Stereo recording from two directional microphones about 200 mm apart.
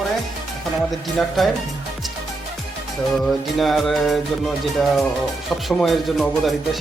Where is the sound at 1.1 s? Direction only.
Centre (ahead or behind).